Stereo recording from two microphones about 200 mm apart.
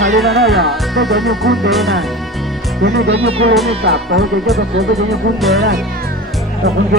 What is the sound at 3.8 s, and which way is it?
Speech, 55° right (ahead or behind).